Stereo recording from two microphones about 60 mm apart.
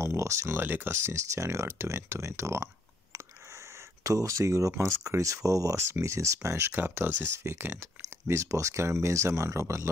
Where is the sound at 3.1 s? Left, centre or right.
Right.